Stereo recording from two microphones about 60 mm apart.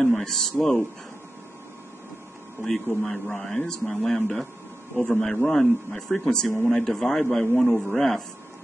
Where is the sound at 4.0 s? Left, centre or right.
Centre.